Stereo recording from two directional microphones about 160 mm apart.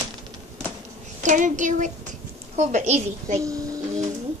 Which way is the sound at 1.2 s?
50° right (ahead or behind).